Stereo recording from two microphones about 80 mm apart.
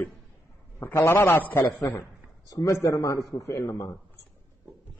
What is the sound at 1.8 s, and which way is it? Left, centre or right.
A man's voice, left.